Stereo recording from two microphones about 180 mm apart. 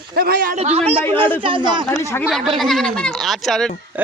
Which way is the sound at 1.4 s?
25° right (ahead or behind).